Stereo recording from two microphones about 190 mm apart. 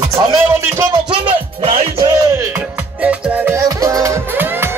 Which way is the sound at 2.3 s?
15° right (ahead or behind).